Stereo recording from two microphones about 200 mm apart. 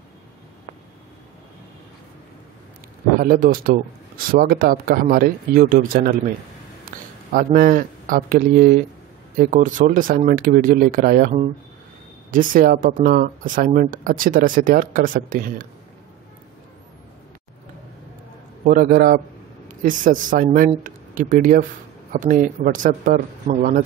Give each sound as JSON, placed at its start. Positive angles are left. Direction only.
{"t": 3.2, "sound": "speech", "side_deg": -45}
{"t": 6.9, "sound": "a sound", "side_deg": -45}
{"t": 7.3, "sound": "speech", "side_deg": -45}
{"t": 18.7, "sound": "speech", "side_deg": -45}